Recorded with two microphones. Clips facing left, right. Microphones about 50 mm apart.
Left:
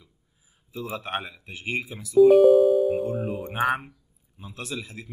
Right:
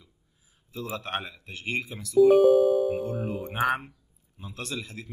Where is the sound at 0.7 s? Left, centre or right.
Centre.